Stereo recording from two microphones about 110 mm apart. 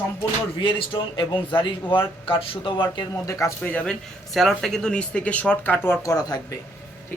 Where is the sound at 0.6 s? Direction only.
50° left (ahead or behind).